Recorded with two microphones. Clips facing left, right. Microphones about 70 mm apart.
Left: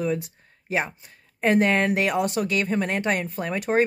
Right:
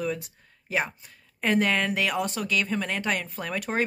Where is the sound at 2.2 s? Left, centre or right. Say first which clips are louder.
Left 6 dB; left.